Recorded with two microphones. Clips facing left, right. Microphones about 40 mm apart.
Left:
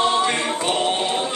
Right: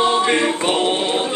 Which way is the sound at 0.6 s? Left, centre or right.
Right.